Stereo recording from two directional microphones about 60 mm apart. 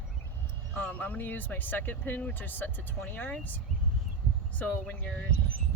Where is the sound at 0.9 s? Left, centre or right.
Left.